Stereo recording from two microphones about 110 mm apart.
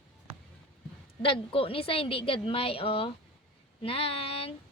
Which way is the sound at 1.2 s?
55° left (ahead or behind).